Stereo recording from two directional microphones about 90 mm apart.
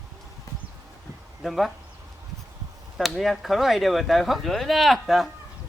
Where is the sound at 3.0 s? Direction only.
Centre (ahead or behind).